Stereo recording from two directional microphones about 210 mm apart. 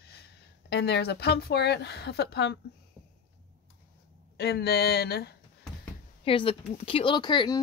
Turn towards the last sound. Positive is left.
turn(degrees=20)  # may be behind; listen again after turning